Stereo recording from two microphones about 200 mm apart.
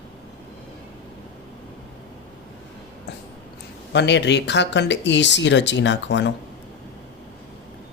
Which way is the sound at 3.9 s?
60° left (ahead or behind).